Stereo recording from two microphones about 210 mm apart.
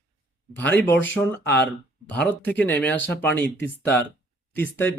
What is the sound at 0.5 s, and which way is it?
Speech, 10° left (ahead or behind).